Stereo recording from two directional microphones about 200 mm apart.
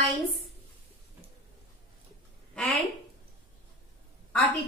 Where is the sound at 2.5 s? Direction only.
Centre (ahead or behind).